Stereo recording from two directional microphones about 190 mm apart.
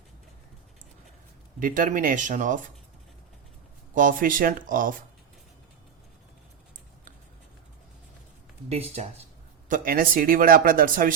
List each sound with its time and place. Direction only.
1.5 s speech: 45° right (ahead or behind)
3.9 s speech: 45° right (ahead or behind)
9.6 s speech: 45° right (ahead or behind)